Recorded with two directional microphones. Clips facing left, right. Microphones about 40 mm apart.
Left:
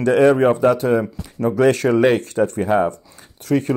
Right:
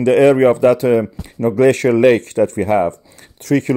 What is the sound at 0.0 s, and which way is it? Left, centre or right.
A man's voice, right.